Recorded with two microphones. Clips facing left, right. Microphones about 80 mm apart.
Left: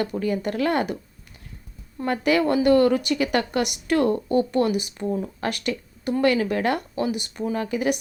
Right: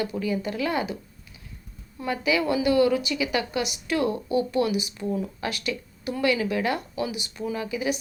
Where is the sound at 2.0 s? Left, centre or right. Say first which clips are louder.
Left 4 dB; left.